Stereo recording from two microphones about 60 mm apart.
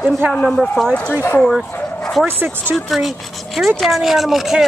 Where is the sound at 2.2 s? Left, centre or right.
Right.